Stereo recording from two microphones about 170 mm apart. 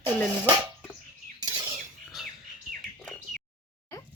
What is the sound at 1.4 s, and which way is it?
Bird, 25° right (ahead or behind).